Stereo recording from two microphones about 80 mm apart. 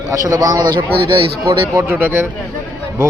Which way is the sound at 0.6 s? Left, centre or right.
Right.